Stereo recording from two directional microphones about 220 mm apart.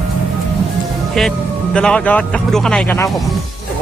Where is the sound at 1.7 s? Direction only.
5° left (ahead or behind).